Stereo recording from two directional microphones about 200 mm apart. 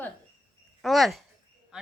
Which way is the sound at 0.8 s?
Centre (ahead or behind).